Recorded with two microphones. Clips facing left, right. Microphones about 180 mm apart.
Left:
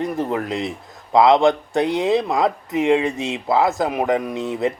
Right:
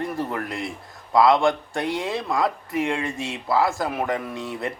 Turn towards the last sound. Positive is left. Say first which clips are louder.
# left 7 dB
turn(degrees=20)  # may be behind; listen again after turning